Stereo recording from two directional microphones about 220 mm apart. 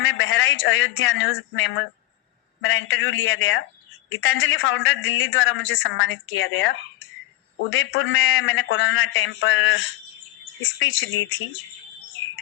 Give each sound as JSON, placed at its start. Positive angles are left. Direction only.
{"t": 0.0, "sound": "a woman's voice", "side_deg": 60}